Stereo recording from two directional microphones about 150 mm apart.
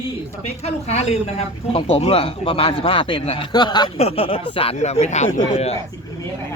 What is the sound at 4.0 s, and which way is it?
Speech, 40° left (ahead or behind).